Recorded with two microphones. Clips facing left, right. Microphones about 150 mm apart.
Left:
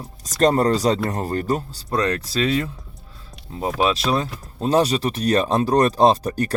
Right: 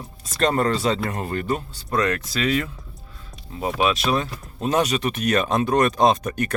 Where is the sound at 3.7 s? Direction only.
35° left (ahead or behind).